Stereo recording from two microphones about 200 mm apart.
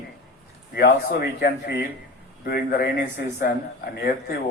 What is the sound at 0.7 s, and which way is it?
A man's voice, 50° left (ahead or behind).